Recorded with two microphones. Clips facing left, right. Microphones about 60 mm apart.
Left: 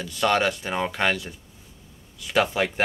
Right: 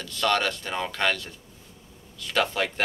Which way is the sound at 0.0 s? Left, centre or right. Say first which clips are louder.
Left 3 dB; centre.